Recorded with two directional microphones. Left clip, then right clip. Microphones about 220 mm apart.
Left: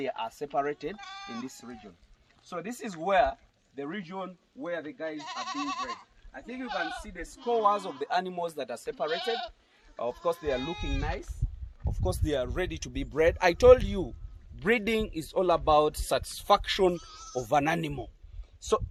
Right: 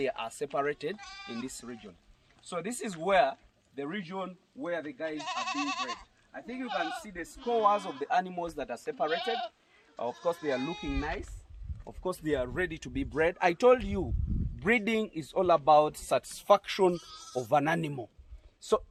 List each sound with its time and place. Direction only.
0.0 s speech: 25° right (ahead or behind)
0.9 s speech: 10° right (ahead or behind)
5.1 s speech: 35° right (ahead or behind)
6.3 s speech: 15° left (ahead or behind)
8.0 s a man's voice: 30° left (ahead or behind)
9.0 s speech: 20° left (ahead or behind)
9.9 s a man's voice: 45° left (ahead or behind)
12.0 s a man's voice: 50° left (ahead or behind); by 17.0 s 35° left (ahead or behind)
17.0 s speech: 20° right (ahead or behind)
17.4 s speech: 30° left (ahead or behind)